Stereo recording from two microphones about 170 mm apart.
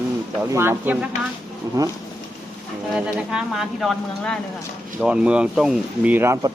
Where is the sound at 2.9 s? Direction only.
5° right (ahead or behind).